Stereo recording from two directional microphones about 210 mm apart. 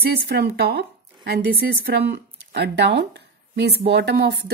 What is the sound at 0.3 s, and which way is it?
Speech, 50° right (ahead or behind).